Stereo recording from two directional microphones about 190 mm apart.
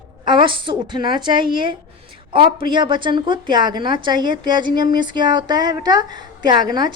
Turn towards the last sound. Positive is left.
turn(degrees=-20)  # may be behind; listen again after turning